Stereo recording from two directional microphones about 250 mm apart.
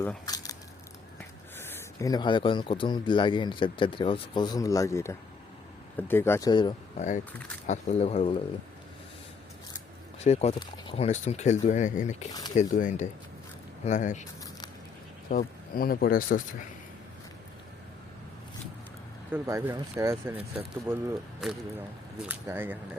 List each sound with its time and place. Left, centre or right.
0.0 s a sound: centre
1.5 s speech: centre
10.2 s speech: left
15.3 s speech: left
19.3 s speech: centre